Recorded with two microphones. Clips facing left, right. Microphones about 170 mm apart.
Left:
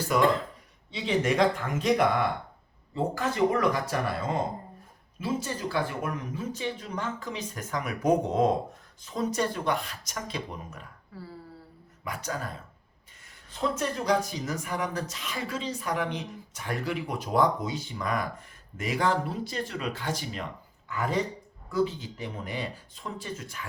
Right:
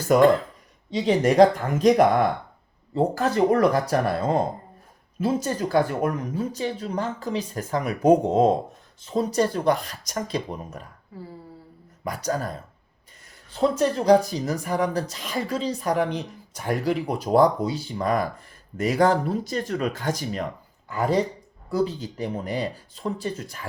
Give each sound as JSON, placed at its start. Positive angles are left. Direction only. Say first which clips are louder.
{"t": 0.0, "sound": "speech", "louder": "right 7 dB", "side_deg": -45}
{"t": 11.1, "sound": "a sound", "louder": "right 4 dB", "side_deg": -20}
{"t": 12.0, "sound": "speech", "louder": "right 7 dB", "side_deg": -40}